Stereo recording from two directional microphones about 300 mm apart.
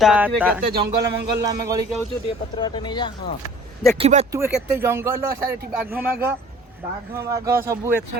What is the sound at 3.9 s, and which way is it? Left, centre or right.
Speech, right.